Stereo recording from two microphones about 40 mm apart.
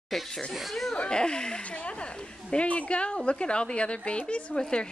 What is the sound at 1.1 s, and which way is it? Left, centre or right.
Speech, centre.